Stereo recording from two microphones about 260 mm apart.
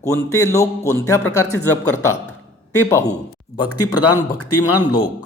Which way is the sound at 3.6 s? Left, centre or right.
Left.